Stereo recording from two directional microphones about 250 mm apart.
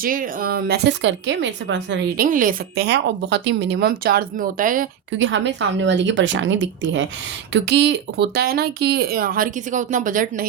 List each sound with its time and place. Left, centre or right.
0.0 s a woman's voice: right
5.1 s a woman's voice: right